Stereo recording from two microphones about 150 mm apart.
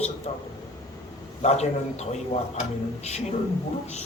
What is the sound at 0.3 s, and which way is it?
Speech, 50° left (ahead or behind).